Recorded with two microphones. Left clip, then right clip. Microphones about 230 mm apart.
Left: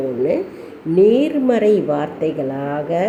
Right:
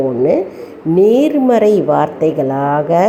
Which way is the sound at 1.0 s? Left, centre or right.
Centre.